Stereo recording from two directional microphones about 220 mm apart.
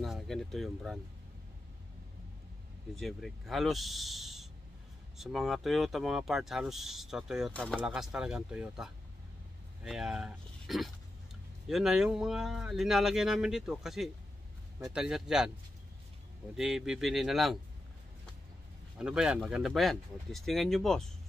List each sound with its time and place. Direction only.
0.0 s speech: centre (ahead or behind)
3.0 s speech: centre (ahead or behind)
16.5 s speech: centre (ahead or behind)
18.9 s speech: 5° right (ahead or behind)